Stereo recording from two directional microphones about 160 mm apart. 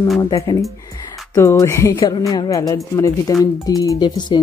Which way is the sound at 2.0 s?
25° left (ahead or behind).